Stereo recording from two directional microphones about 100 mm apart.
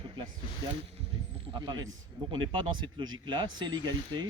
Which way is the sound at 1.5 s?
45° right (ahead or behind).